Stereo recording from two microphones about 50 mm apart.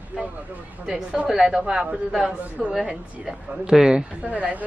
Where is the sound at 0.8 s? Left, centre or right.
Centre.